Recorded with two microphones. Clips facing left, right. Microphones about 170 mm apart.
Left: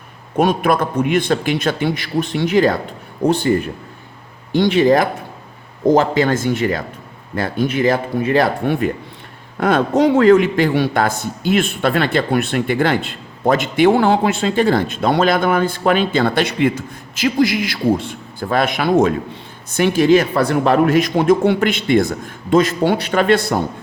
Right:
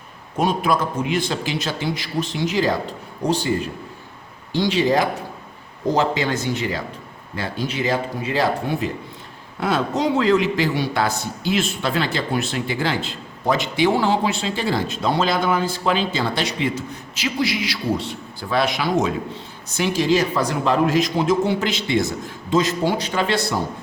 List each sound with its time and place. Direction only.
0.3 s a man's voice: 60° left (ahead or behind)